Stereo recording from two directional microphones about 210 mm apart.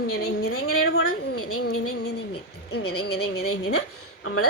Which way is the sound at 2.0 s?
50° left (ahead or behind).